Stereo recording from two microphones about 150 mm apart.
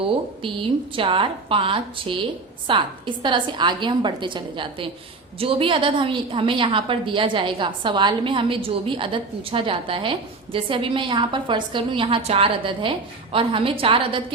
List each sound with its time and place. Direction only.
0.4 s a woman's voice: 35° right (ahead or behind)